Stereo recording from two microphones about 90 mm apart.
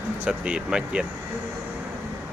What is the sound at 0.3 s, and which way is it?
Speech, 10° right (ahead or behind).